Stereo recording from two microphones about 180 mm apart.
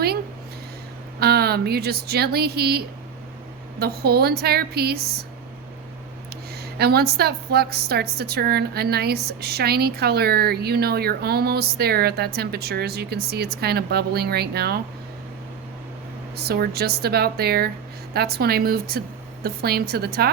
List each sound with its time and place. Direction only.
1.2 s a woman's voice: 60° right (ahead or behind)
6.3 s a woman's voice: 60° right (ahead or behind)
16.3 s a woman's voice: 60° right (ahead or behind)